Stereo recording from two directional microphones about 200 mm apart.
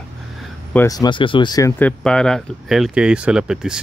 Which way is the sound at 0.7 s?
15° left (ahead or behind).